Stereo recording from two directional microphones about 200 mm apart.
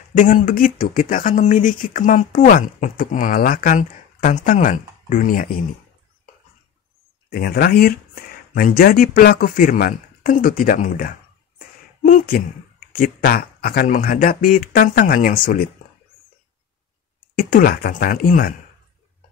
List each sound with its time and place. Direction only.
0.1 s speech: 40° left (ahead or behind)
7.2 s speech: 50° left (ahead or behind)
17.4 s speech: 45° left (ahead or behind)